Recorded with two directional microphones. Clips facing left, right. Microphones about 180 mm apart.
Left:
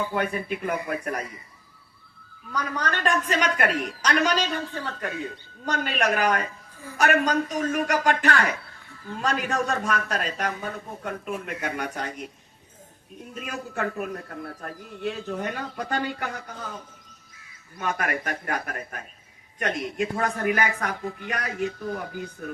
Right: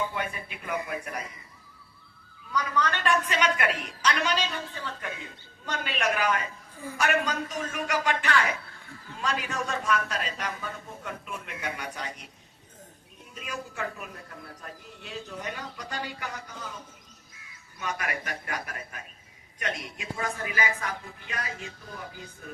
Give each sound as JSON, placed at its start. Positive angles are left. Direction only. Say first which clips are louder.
{"t": 0.1, "sound": "a man's voice", "louder": "left 8 dB", "side_deg": 50}
{"t": 2.5, "sound": "a man's voice", "louder": "even", "side_deg": 50}
{"t": 13.3, "sound": "a man's voice", "louder": "left 5 dB", "side_deg": 55}
{"t": 17.7, "sound": "a man's voice", "louder": "left 5 dB", "side_deg": 50}